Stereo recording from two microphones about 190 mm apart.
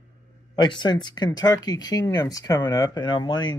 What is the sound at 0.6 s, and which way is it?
Speech, 25° left (ahead or behind).